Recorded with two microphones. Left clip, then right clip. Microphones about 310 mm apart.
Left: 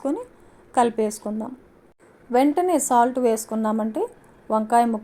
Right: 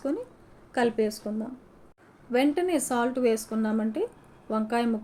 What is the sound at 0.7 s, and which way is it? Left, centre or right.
A woman's voice, centre.